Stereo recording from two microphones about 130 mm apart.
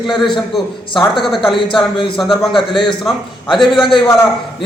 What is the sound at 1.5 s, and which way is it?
Speech, 40° left (ahead or behind).